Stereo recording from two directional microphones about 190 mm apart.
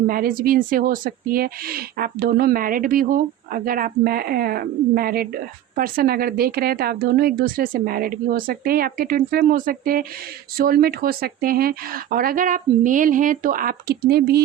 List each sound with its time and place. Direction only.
0.1 s speech: 50° right (ahead or behind)